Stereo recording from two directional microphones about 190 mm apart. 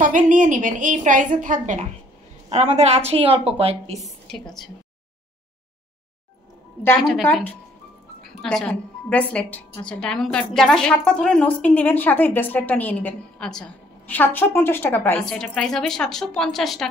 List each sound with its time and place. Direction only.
0.0 s a woman's voice: 45° right (ahead or behind)
4.0 s a woman's voice: centre (ahead or behind)
7.0 s a woman's voice: centre (ahead or behind)
8.4 s a woman's voice: centre (ahead or behind)